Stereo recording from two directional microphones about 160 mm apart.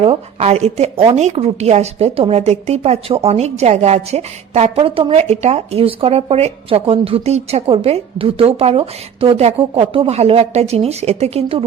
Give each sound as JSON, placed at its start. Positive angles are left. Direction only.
{"t": 0.0, "sound": "a woman's voice", "side_deg": -40}